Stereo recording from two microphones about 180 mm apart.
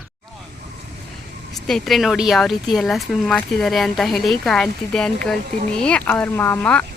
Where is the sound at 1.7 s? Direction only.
Centre (ahead or behind).